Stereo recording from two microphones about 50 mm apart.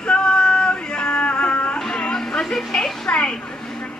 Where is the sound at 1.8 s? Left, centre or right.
Centre.